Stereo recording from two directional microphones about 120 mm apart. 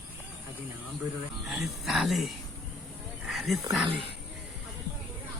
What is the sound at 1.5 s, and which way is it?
Speech, 5° right (ahead or behind).